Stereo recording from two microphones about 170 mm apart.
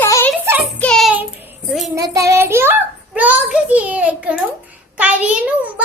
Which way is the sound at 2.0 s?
20° right (ahead or behind).